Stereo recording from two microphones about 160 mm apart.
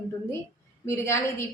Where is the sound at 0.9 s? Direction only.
15° left (ahead or behind).